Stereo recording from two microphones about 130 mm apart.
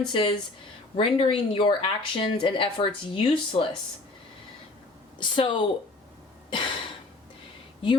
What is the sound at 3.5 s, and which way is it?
Speech, 50° left (ahead or behind).